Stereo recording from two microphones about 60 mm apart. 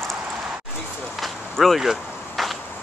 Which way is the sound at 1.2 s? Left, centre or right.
Centre.